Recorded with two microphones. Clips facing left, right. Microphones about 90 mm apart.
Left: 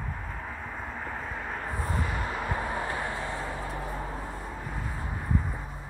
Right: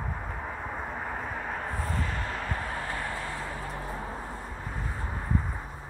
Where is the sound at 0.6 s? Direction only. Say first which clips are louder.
Right 2 dB; 15° right (ahead or behind).